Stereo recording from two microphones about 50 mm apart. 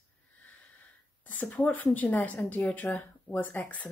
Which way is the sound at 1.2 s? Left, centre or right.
Left.